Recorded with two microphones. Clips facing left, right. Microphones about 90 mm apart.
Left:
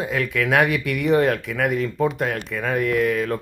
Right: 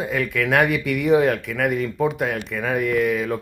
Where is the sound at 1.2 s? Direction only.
Centre (ahead or behind).